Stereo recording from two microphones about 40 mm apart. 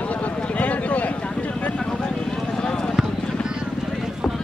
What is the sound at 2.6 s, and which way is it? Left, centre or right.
Vehicle, left.